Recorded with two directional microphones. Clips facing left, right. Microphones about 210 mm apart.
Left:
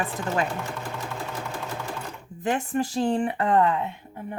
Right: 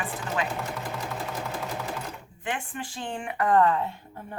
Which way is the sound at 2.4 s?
40° left (ahead or behind).